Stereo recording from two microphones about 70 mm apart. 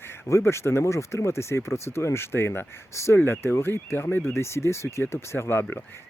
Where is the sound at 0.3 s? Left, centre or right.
Left.